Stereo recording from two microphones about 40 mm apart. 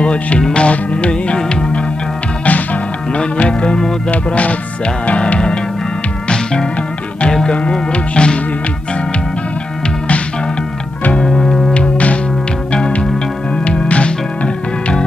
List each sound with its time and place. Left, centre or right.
0.0 s speech: left
3.2 s speech: left
4.1 s music: left
6.2 s music: left
7.7 s music: left
11.1 s music: centre
11.7 s music: left
13.7 s music: left